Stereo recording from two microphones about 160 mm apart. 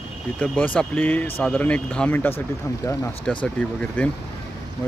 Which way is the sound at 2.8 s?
20° left (ahead or behind).